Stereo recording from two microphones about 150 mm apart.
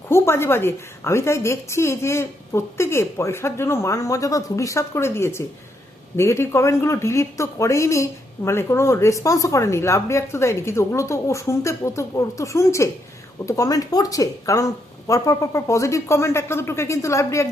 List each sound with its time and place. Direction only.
0.1 s a woman's voice: 15° left (ahead or behind)